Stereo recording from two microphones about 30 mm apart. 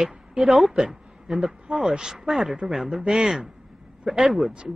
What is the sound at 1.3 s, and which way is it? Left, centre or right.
Speech, centre.